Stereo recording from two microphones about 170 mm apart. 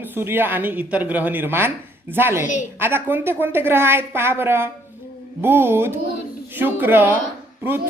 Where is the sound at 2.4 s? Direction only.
45° left (ahead or behind).